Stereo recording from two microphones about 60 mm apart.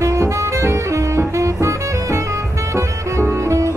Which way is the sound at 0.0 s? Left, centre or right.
Right.